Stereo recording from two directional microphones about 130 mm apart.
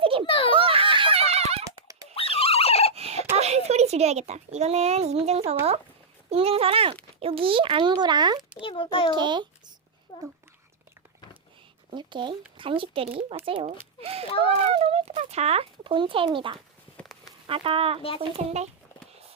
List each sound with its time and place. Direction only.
0.0 s giggle: 45° right (ahead or behind)
0.3 s a child's voice: 45° left (ahead or behind)
0.5 s giggle: 45° right (ahead or behind)
2.1 s a sound: 45° left (ahead or behind)
2.9 s a sound: 55° right (ahead or behind)
3.3 s a child's voice: 55° right (ahead or behind); by 8.4 s 35° right (ahead or behind)
8.4 s a sound: 10° right (ahead or behind)
8.6 s a child's voice: 45° left (ahead or behind)
9.1 s a child's voice: 35° right (ahead or behind)
10.1 s speech: 35° left (ahead or behind)
11.9 s a child's voice: 35° right (ahead or behind)
18.2 s speech: 55° right (ahead or behind)